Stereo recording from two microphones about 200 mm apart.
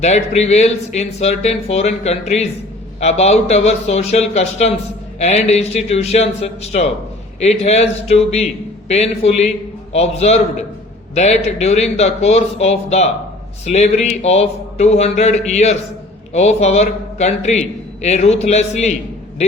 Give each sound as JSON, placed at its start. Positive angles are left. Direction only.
{"t": 0.0, "sound": "a man's voice", "side_deg": 35}